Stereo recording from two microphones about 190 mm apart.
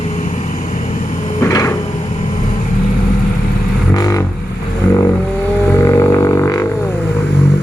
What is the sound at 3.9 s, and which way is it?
Vehicle, 20° left (ahead or behind).